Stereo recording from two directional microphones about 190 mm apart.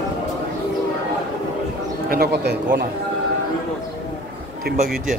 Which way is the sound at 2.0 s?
55° right (ahead or behind).